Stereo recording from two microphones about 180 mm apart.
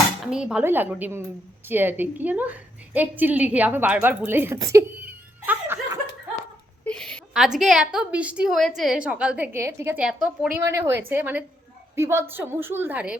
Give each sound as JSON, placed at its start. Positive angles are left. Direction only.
{"t": 0.3, "sound": "a woman's voice", "side_deg": -5}
{"t": 6.8, "sound": "a woman's voice", "side_deg": 5}
{"t": 10.6, "sound": "a woman's voice", "side_deg": -15}